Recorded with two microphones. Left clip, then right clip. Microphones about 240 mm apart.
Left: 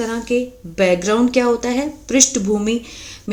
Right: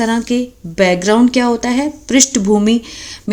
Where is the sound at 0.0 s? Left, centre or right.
Right.